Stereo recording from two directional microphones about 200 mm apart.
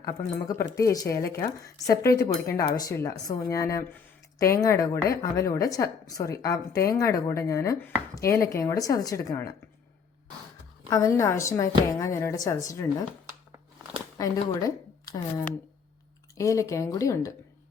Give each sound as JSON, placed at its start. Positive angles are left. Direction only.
{"t": 0.0, "sound": "a woman's voice", "side_deg": 15}
{"t": 10.8, "sound": "a woman's voice", "side_deg": 15}
{"t": 14.2, "sound": "a woman's voice", "side_deg": 15}